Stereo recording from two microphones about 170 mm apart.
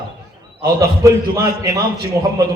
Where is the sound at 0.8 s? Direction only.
20° right (ahead or behind).